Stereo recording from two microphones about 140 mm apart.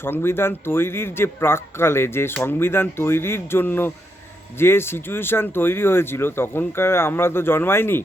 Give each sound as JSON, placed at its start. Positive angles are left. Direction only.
{"t": 0.0, "sound": "speech", "side_deg": 15}